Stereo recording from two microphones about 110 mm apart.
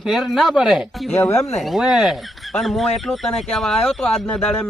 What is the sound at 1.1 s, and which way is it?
Speech, 20° left (ahead or behind).